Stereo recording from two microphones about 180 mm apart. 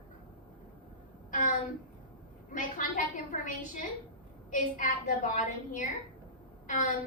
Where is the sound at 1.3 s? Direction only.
45° left (ahead or behind).